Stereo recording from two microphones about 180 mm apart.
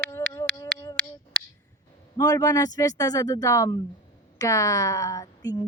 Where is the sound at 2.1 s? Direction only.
20° left (ahead or behind).